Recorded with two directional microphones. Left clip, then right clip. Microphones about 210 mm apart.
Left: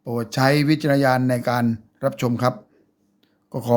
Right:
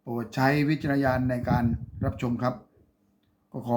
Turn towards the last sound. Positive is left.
turn(degrees=55)  # may be behind; listen again after turning